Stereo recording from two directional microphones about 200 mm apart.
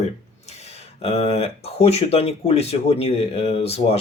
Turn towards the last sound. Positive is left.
turn(degrees=30)  # may be behind; listen again after turning